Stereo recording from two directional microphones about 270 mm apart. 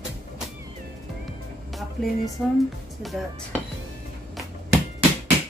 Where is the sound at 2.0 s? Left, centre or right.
Centre.